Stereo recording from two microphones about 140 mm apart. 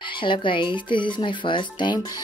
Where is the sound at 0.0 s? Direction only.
35° left (ahead or behind).